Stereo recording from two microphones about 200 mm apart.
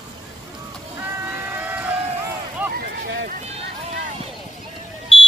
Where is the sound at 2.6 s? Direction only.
10° right (ahead or behind).